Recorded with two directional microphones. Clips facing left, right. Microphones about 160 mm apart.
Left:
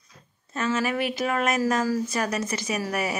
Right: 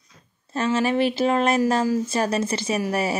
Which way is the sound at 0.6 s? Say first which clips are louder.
Right 5 dB; 30° right (ahead or behind).